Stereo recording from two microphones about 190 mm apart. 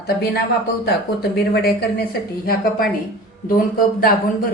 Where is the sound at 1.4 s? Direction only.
55° left (ahead or behind).